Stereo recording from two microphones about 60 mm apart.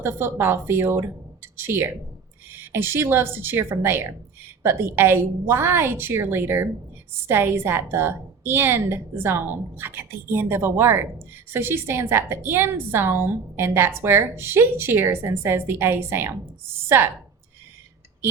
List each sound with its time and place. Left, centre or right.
0.0 s a woman's voice: right